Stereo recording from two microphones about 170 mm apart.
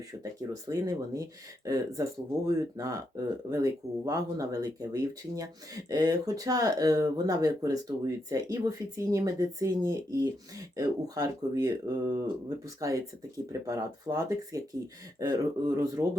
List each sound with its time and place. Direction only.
0.2 s speech: 20° right (ahead or behind)